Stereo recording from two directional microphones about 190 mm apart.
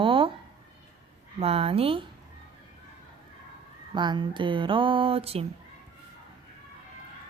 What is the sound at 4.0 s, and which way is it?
Speech, 25° right (ahead or behind).